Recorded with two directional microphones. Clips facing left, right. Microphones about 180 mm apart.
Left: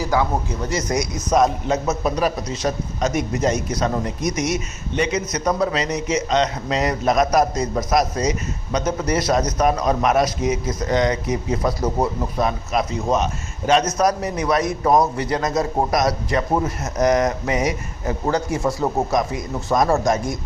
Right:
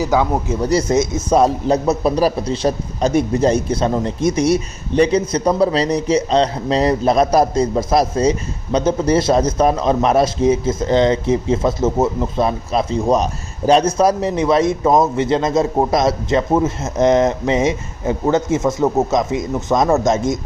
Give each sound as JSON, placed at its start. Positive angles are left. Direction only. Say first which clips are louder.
{"t": 0.0, "sound": "a man's voice", "louder": "right 4 dB", "side_deg": -20}
{"t": 0.6, "sound": "a man's voice", "louder": "right 9 dB", "side_deg": -35}